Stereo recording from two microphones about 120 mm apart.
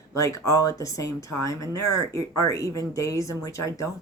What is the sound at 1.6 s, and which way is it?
Speech, 35° right (ahead or behind).